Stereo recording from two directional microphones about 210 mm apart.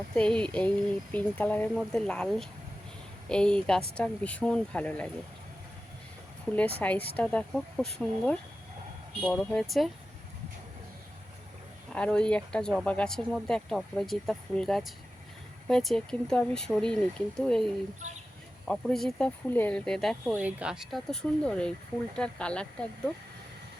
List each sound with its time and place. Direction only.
0.2 s speech: 5° left (ahead or behind)
6.6 s speech: 5° left (ahead or behind)
11.9 s speech: 5° left (ahead or behind)
18.7 s speech: centre (ahead or behind)